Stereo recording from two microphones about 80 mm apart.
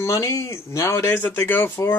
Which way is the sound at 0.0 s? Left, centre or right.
Left.